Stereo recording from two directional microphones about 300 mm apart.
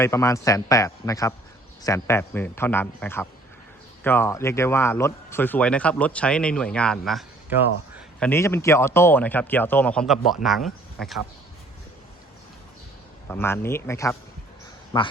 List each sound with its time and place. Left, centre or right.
0.0 s speech: centre
8.3 s speech: centre
13.2 s speech: centre